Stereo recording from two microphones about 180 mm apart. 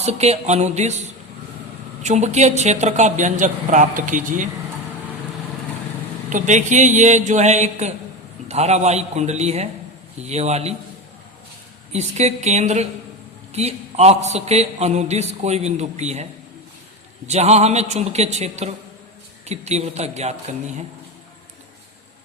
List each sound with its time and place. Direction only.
0.0 s a man's voice: 35° right (ahead or behind)
6.3 s a man's voice: 45° right (ahead or behind)
11.9 s a man's voice: 35° right (ahead or behind)
17.2 s a man's voice: 40° right (ahead or behind)